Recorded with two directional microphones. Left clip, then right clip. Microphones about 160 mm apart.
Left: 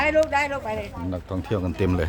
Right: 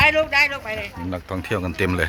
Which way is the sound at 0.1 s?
50° left (ahead or behind).